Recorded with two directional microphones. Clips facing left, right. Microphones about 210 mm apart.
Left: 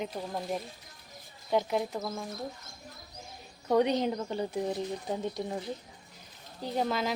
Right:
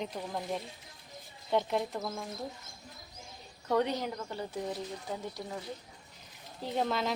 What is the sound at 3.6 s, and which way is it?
Speech, 15° left (ahead or behind).